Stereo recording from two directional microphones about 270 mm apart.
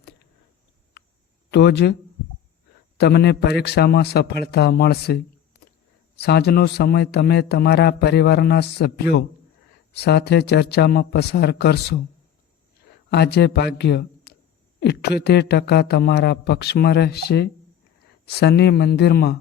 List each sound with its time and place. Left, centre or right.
1.5 s a man's voice: left
3.0 s a man's voice: left
13.1 s a man's voice: left